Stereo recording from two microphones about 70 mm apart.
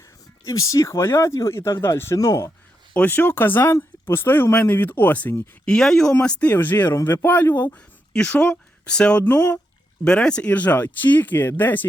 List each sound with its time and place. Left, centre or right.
0.4 s speech: left
2.1 s speech: left
2.9 s speech: left
5.6 s speech: centre
6.2 s speech: left
6.9 s speech: left
7.3 s speech: left
8.1 s speech: centre
9.2 s speech: left
10.0 s speech: centre